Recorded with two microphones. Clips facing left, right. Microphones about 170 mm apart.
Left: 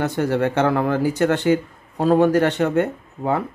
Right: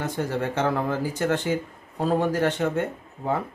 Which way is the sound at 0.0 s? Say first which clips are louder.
Left 7 dB; 75° left (ahead or behind).